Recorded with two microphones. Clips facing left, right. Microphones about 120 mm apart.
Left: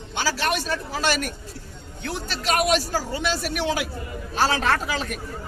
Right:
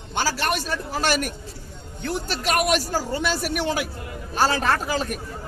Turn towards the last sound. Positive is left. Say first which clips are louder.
# right 1 dB
turn(degrees=-45)  # may be behind; listen again after turning